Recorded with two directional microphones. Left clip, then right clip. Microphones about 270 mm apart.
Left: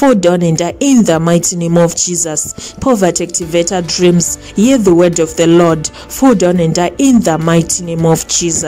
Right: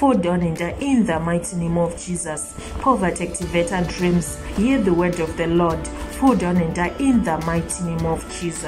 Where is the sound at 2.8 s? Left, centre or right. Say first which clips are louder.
Left 7 dB; left.